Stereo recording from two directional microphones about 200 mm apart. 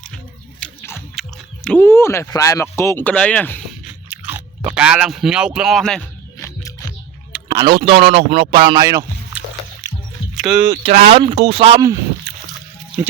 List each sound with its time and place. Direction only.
0.6 s biting: centre (ahead or behind)
1.6 s speech: 5° left (ahead or behind)
4.1 s speech: 10° right (ahead or behind)
6.6 s music: 15° left (ahead or behind)
7.5 s a man's voice: 25° right (ahead or behind)
9.8 s music: 20° right (ahead or behind)
10.3 s speech: 5° right (ahead or behind)
10.9 s a man's voice: 30° right (ahead or behind)
13.0 s speech: 10° right (ahead or behind)